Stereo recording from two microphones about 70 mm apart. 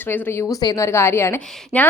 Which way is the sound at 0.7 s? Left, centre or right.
Left.